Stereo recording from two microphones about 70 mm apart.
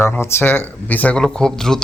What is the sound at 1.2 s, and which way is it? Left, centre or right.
Speech, centre.